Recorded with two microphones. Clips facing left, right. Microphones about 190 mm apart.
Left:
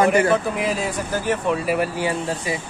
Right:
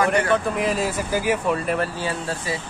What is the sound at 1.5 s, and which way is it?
Speech, 5° left (ahead or behind).